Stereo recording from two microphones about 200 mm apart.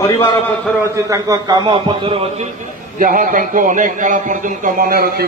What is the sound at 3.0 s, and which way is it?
Speech, 45° right (ahead or behind).